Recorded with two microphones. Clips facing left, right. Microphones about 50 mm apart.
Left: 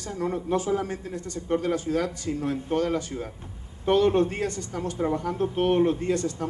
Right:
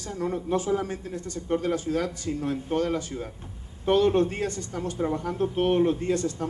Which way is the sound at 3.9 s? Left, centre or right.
Left.